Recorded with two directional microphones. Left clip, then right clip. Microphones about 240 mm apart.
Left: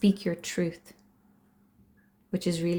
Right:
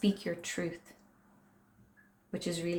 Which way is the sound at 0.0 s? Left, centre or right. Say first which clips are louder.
Left 5 dB; left.